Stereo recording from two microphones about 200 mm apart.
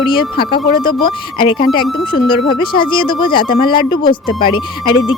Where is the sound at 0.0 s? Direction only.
25° left (ahead or behind).